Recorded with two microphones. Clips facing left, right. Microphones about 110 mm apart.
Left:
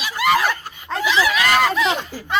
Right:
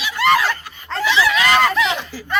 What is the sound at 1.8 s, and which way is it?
Speech, 40° left (ahead or behind).